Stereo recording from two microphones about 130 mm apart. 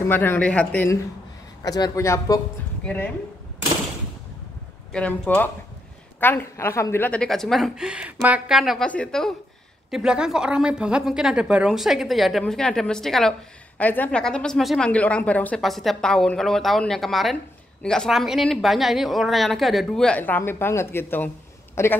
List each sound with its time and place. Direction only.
0.1 s speech: 15° left (ahead or behind)
1.6 s speech: 30° left (ahead or behind)
4.9 s a woman's voice: 10° left (ahead or behind)
8.8 s speech: 10° left (ahead or behind)
9.8 s a woman's voice: 5° right (ahead or behind); by 15.6 s 10° left (ahead or behind)
15.6 s a woman's voice: centre (ahead or behind); by 21.9 s 20° left (ahead or behind)